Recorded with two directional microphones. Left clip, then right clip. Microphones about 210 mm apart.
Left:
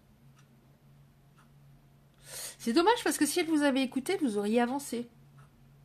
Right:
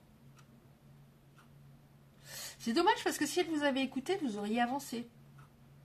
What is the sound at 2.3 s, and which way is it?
Speech, 35° left (ahead or behind).